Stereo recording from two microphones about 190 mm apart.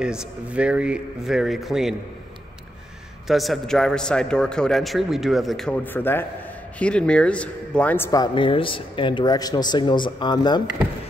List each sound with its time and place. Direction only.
0.0 s a man's voice: 5° right (ahead or behind)
3.3 s a man's voice: centre (ahead or behind); by 10.6 s 20° left (ahead or behind)